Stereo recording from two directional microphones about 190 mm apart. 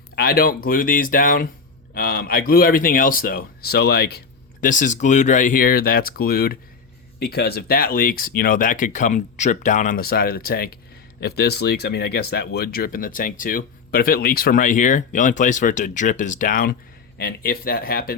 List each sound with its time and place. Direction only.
0.2 s speech: 55° left (ahead or behind)
4.6 s speech: 40° left (ahead or behind)